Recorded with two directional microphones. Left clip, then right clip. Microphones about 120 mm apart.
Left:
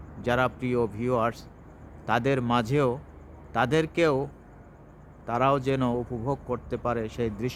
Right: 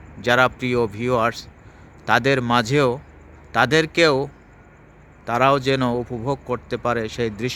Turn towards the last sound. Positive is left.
turn(degrees=-15)  # may be behind; listen again after turning